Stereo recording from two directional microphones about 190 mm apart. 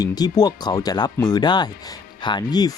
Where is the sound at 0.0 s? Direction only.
20° left (ahead or behind).